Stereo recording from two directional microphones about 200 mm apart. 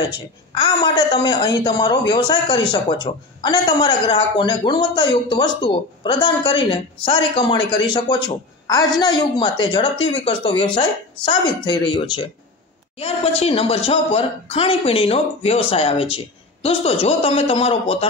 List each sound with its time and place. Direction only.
0.1 s a woman's voice: 20° left (ahead or behind)